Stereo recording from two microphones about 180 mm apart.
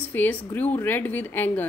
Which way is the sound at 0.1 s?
10° left (ahead or behind).